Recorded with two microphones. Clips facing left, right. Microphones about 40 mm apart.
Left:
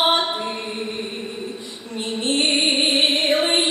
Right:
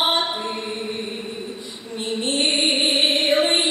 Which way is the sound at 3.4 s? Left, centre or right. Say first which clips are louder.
Even; left.